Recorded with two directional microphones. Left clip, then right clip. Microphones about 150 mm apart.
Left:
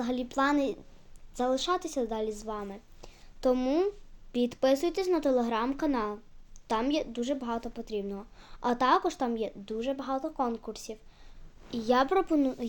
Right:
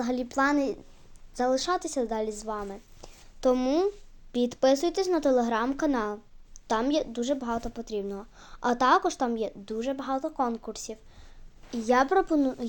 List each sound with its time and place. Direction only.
0.0 s a woman's voice: 30° right (ahead or behind); by 12.6 s 10° right (ahead or behind)